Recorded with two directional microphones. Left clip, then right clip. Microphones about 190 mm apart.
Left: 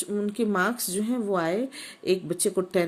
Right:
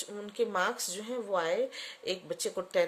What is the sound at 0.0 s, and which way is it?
Speech, 20° left (ahead or behind).